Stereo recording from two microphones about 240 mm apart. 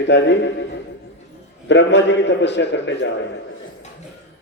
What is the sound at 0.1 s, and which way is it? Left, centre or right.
Speech, left.